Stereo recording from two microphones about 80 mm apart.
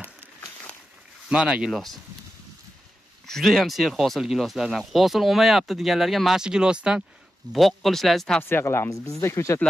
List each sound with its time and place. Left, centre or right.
1.3 s speech: centre
1.7 s speech: centre
3.3 s speech: centre
7.5 s speech: centre
8.4 s speech: left